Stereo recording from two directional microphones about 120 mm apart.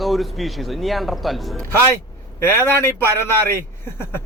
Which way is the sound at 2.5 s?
20° left (ahead or behind).